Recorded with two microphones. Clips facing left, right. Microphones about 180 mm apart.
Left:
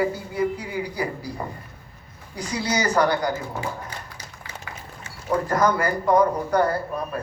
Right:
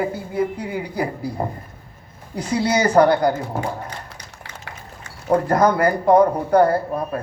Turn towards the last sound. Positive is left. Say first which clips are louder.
# right 6 dB
turn(degrees=-35)  # may be behind; listen again after turning